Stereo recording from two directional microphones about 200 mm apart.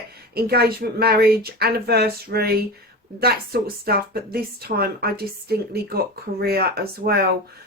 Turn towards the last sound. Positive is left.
turn(degrees=-50)  # may be behind; listen again after turning